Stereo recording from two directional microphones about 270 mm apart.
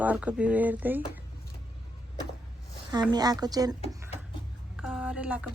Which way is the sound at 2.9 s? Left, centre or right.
Centre.